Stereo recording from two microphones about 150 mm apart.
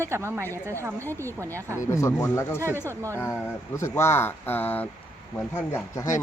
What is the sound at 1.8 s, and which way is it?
Speech, 20° left (ahead or behind).